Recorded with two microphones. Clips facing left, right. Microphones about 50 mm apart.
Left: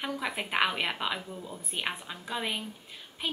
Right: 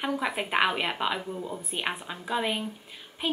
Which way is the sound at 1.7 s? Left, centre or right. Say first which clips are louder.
Right 1 dB; centre.